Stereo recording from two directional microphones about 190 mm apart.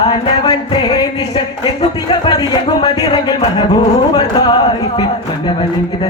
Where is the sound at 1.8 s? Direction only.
25° left (ahead or behind).